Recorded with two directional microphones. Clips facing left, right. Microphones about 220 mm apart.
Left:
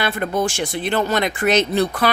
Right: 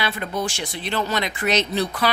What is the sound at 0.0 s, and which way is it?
Speech, 50° left (ahead or behind).